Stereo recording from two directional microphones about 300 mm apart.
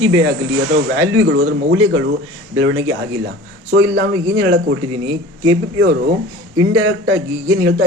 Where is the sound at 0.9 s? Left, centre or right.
Right.